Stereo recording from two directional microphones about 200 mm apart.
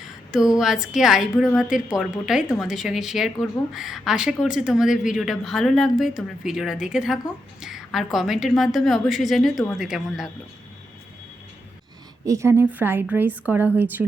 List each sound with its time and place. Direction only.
0.3 s speech: 5° right (ahead or behind)
12.2 s a woman's voice: 15° right (ahead or behind)